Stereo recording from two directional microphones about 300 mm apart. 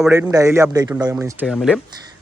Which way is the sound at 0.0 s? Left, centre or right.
Centre.